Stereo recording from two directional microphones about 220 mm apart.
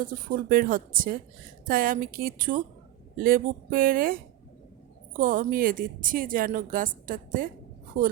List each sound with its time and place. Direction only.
0.0 s speech: 40° right (ahead or behind)